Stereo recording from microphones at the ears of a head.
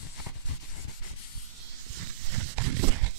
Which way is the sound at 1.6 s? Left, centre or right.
Right.